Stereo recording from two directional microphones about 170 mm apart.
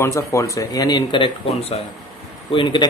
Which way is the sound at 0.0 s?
15° left (ahead or behind).